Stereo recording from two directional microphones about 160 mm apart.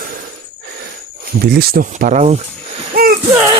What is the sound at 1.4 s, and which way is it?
Speech, 75° right (ahead or behind).